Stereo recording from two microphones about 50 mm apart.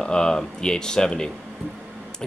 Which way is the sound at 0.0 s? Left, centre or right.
Centre.